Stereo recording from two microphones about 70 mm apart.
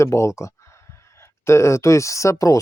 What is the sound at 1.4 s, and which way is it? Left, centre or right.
Speech, left.